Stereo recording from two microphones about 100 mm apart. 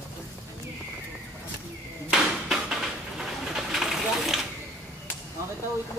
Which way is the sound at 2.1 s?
5° right (ahead or behind).